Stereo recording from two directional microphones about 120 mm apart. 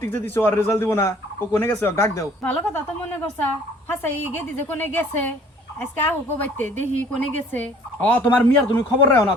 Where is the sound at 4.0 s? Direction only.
15° left (ahead or behind).